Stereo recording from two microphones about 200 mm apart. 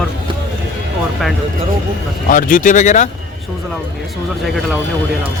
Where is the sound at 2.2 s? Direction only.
45° left (ahead or behind).